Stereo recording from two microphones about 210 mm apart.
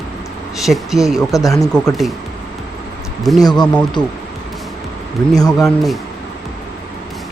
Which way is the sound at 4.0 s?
20° left (ahead or behind).